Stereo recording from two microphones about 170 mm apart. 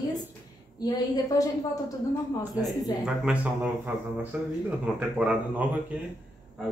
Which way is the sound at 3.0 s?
5° right (ahead or behind).